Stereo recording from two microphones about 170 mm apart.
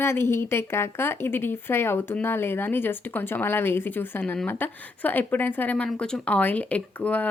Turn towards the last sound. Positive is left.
turn(degrees=10)  # may be behind; listen again after turning